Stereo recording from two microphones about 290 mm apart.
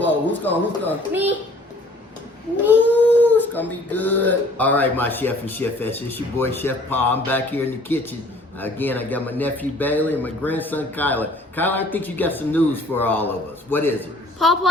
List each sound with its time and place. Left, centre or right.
0.0 s speech: centre
3.0 s a man's voice: centre